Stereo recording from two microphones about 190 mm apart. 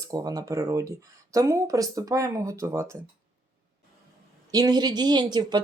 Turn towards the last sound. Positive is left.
turn(degrees=-20)  # may be behind; listen again after turning